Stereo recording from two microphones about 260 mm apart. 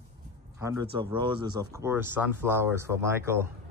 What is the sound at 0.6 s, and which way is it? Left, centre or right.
Speech, centre.